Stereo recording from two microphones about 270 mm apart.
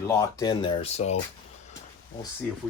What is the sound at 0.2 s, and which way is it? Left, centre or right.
Speech, centre.